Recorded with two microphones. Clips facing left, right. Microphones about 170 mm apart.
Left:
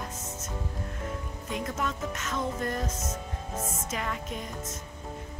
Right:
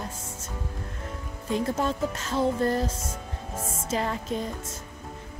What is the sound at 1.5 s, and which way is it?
Speech, 30° right (ahead or behind).